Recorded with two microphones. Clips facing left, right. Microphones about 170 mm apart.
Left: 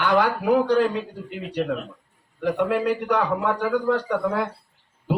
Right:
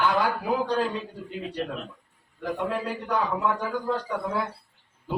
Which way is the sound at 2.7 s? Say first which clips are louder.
Left 6 dB; 75° left (ahead or behind).